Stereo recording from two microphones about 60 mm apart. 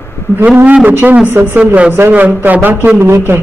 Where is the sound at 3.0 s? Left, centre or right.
Right.